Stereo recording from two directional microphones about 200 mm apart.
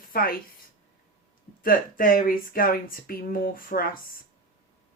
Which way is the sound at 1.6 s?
45° left (ahead or behind).